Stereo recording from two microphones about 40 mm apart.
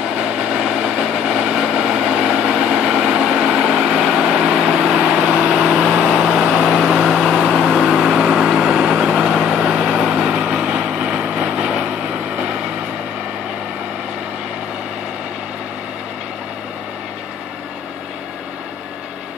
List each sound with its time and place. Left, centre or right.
0.1 s vehicle: right
3.8 s a sound: centre
4.2 s vehicle: centre
6.4 s vehicle: centre